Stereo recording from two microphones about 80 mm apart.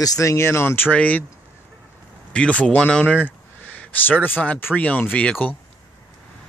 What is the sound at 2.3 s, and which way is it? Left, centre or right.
Speech, centre.